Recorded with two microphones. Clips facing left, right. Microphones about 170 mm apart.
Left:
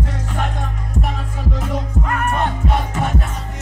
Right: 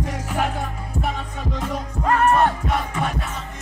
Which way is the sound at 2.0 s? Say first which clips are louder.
Right 7 dB; 30° right (ahead or behind).